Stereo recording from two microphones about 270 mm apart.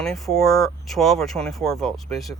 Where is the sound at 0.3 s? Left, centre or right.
Centre.